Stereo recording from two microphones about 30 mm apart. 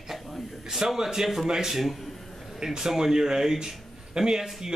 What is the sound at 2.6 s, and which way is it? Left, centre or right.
A man's voice, centre.